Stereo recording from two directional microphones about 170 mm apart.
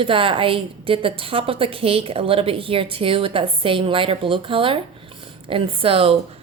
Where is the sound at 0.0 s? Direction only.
30° right (ahead or behind).